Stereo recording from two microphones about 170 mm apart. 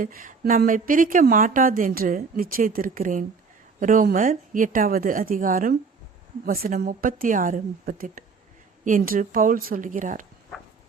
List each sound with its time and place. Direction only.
0.0 s a woman's voice: 50° right (ahead or behind)